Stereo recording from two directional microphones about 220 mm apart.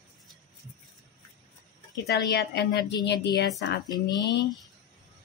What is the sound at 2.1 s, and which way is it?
A woman's voice, 50° left (ahead or behind).